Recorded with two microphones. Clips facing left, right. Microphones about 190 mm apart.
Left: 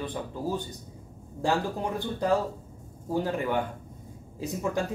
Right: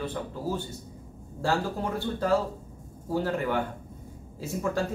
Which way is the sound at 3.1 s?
15° left (ahead or behind).